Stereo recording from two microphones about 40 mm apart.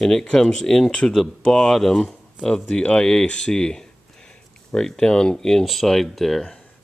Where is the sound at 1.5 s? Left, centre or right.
Centre.